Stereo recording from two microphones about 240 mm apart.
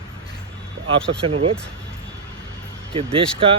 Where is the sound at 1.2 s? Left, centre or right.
Right.